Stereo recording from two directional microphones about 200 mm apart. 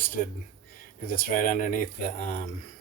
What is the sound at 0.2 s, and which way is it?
Speech, 40° left (ahead or behind).